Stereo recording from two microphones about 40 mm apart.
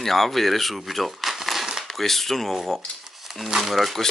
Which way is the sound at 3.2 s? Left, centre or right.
Centre.